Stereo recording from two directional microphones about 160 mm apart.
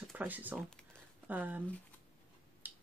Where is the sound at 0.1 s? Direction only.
10° right (ahead or behind).